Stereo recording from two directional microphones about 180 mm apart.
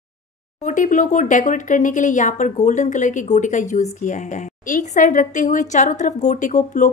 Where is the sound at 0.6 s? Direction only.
45° left (ahead or behind).